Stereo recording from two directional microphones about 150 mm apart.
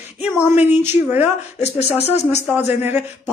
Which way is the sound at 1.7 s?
15° left (ahead or behind).